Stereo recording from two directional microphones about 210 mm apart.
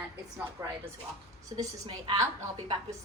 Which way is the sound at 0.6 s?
15° right (ahead or behind).